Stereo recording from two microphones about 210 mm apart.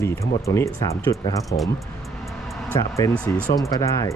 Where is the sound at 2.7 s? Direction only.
10° left (ahead or behind).